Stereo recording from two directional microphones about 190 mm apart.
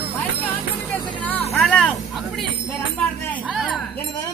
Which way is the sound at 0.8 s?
5° left (ahead or behind).